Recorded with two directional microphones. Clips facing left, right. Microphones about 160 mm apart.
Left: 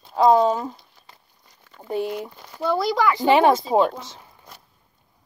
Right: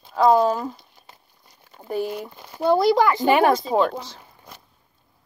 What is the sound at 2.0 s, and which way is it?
Speech, 5° right (ahead or behind).